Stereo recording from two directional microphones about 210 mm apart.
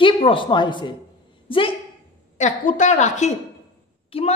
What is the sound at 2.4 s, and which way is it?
A woman's voice, 35° left (ahead or behind).